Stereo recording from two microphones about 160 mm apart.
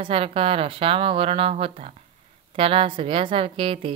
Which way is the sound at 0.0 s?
35° right (ahead or behind).